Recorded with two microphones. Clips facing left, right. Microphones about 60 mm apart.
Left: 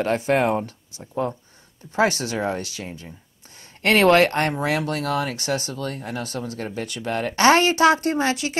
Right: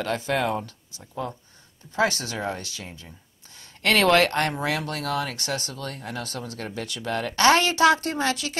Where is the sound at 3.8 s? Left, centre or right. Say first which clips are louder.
Left 3 dB; left.